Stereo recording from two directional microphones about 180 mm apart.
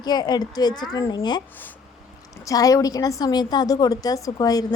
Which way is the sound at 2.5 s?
20° left (ahead or behind).